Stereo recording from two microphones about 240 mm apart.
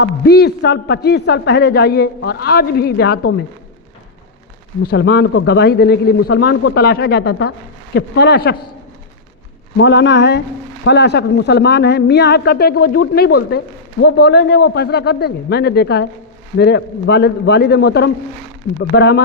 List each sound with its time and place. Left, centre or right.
0.0 s speech: left
4.9 s speech: left
9.7 s speech: left